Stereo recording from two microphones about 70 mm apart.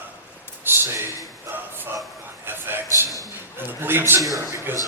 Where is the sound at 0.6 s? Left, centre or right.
Right.